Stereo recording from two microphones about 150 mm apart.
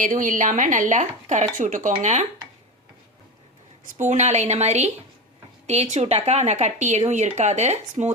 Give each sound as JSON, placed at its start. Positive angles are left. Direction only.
{"t": 0.0, "sound": "speech", "side_deg": -60}
{"t": 3.9, "sound": "speech", "side_deg": -50}